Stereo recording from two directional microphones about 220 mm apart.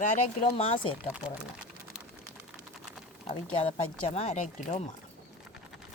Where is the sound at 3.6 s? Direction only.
25° left (ahead or behind).